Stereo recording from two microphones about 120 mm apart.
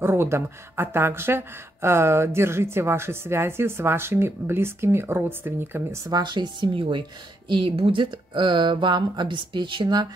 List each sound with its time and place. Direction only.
0.0 s speech: 20° right (ahead or behind)
6.1 s speech: 40° right (ahead or behind)